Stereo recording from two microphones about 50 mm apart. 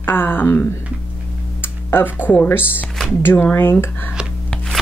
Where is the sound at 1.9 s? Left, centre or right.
Left.